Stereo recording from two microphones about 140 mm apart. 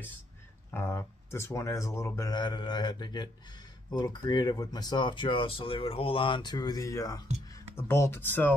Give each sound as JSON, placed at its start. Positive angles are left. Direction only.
{"t": 0.7, "sound": "speech", "side_deg": 20}